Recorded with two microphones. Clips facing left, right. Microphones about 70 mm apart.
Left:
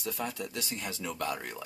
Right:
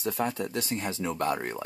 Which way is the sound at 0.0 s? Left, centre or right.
Right.